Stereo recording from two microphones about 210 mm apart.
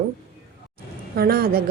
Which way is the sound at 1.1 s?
45° right (ahead or behind).